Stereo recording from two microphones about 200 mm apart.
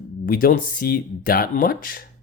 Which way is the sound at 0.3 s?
45° left (ahead or behind).